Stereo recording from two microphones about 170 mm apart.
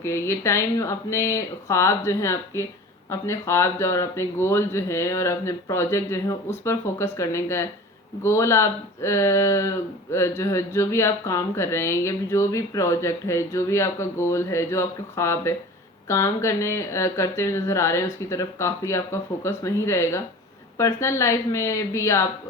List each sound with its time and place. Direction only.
0.0 s speech: 15° left (ahead or behind)